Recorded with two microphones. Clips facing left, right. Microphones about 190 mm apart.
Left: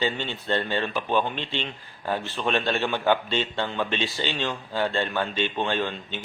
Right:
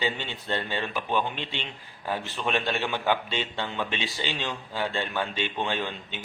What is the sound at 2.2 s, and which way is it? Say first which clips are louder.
A man's voice: left 2 dB; 10° right (ahead or behind).